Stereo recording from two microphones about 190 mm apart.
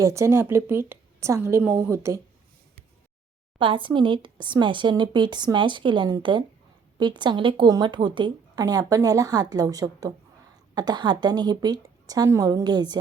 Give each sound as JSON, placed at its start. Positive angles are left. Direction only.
{"t": 0.0, "sound": "a woman's voice", "side_deg": -15}
{"t": 3.6, "sound": "a woman's voice", "side_deg": -25}